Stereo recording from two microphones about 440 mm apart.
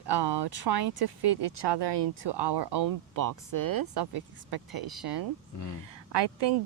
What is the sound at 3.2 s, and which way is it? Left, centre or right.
Speech, right.